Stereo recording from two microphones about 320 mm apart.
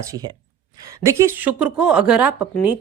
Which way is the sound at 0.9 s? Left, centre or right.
Centre.